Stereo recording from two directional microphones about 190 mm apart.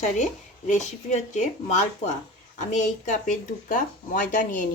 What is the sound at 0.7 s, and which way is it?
Speech, 40° left (ahead or behind).